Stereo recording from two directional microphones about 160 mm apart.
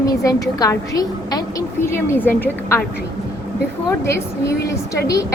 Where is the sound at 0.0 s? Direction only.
20° left (ahead or behind).